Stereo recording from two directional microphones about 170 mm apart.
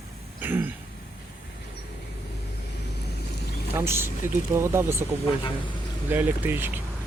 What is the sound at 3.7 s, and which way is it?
Speech, 15° right (ahead or behind).